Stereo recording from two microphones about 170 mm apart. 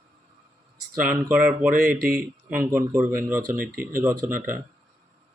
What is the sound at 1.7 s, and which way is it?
Speech, 55° right (ahead or behind).